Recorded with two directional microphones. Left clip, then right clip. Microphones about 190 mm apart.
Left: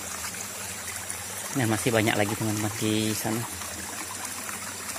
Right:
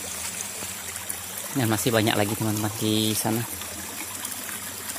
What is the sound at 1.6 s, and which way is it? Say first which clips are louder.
Speech: right 2 dB; 15° right (ahead or behind).